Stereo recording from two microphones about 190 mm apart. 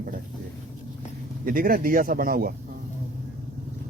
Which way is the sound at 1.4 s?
45° right (ahead or behind).